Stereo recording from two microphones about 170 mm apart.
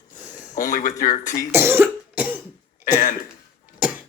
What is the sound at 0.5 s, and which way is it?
Speech, 50° left (ahead or behind).